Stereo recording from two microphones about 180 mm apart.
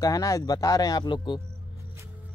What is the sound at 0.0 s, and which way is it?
Speech, 20° left (ahead or behind).